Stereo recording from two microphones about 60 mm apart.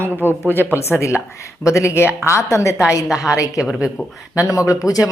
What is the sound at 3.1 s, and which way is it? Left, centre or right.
Speech, centre.